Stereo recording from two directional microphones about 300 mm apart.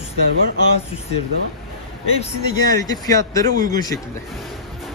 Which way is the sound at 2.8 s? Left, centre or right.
Centre.